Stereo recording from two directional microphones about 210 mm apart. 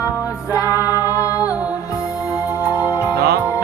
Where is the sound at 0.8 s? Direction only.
10° right (ahead or behind).